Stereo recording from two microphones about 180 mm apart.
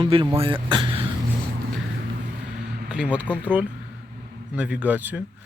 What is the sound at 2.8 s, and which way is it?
Speech, 5° right (ahead or behind).